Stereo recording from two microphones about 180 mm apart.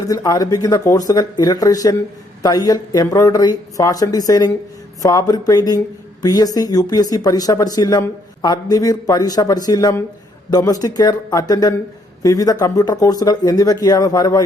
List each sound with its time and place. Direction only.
0.1 s speech: 20° left (ahead or behind)